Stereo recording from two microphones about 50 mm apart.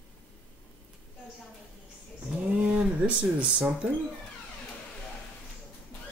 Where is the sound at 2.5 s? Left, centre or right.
Right.